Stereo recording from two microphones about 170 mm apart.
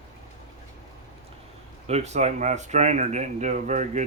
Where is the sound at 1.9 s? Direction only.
40° right (ahead or behind).